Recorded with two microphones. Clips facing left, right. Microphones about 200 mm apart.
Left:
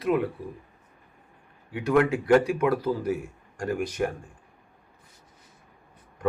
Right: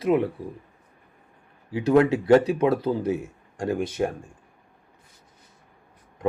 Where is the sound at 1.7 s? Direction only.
25° right (ahead or behind).